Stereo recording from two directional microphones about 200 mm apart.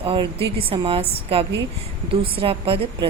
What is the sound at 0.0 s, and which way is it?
A woman's voice, 25° right (ahead or behind).